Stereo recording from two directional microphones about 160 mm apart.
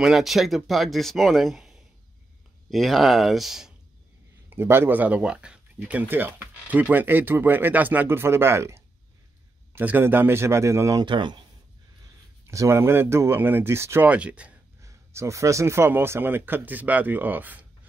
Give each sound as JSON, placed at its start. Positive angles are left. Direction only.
{"t": 0.0, "sound": "speech", "side_deg": 0}
{"t": 4.5, "sound": "speech", "side_deg": -15}
{"t": 12.4, "sound": "speech", "side_deg": -15}
{"t": 14.8, "sound": "speech", "side_deg": -20}